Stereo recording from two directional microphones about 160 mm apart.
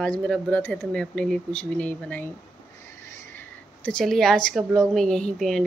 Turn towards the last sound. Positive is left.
turn(degrees=5)  # may be behind; listen again after turning